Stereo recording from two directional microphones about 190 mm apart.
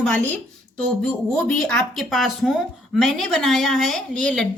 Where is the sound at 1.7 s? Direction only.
5° left (ahead or behind).